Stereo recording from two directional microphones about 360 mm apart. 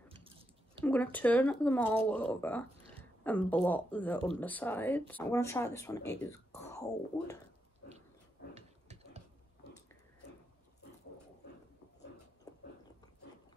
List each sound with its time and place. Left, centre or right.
0.1 s chewing: centre
0.8 s speech: centre
8.5 s a sound: centre